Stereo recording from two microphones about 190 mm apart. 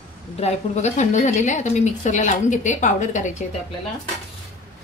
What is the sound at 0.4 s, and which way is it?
A woman's voice, 35° left (ahead or behind).